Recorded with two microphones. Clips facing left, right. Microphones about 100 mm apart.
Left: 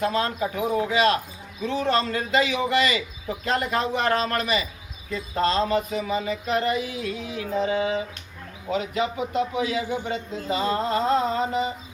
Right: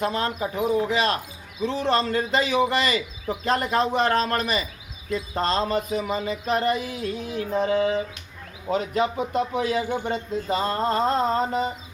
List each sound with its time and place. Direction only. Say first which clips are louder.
0.0 s speech: left 1 dB; 25° right (ahead or behind)
1.6 s a man's voice: right 1 dB; 30° right (ahead or behind)